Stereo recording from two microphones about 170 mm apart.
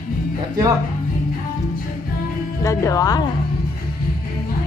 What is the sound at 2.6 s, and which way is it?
Speech, 20° left (ahead or behind).